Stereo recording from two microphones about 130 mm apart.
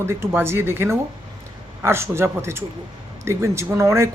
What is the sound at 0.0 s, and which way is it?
Speech, 20° right (ahead or behind).